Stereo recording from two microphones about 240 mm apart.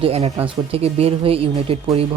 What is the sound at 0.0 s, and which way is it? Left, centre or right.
Speech, right.